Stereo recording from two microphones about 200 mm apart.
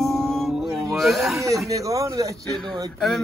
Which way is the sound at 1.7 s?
15° right (ahead or behind).